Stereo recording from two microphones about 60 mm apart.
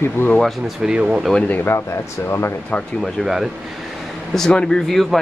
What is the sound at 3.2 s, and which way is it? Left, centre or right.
Speech, centre.